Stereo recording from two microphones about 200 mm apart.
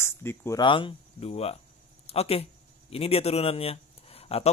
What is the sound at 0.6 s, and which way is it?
Speech, 25° left (ahead or behind).